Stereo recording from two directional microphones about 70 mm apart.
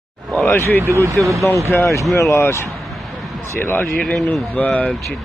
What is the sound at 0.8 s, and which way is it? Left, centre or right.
Speech, right.